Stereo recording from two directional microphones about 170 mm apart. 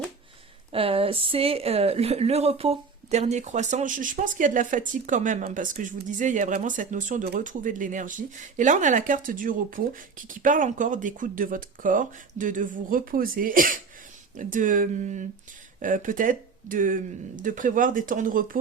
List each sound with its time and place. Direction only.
0.7 s a woman's voice: 35° right (ahead or behind); by 18.6 s 55° right (ahead or behind)